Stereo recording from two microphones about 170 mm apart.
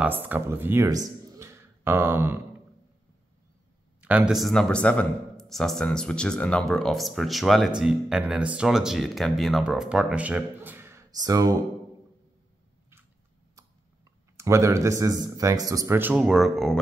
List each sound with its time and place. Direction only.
0.0 s speech: 10° right (ahead or behind)
4.0 s speech: 5° right (ahead or behind); by 11.5 s 20° right (ahead or behind)
13.6 s speech: 20° right (ahead or behind); by 16.7 s centre (ahead or behind)